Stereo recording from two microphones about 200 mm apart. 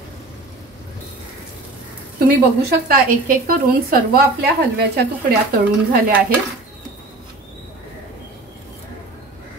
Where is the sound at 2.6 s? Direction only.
50° right (ahead or behind).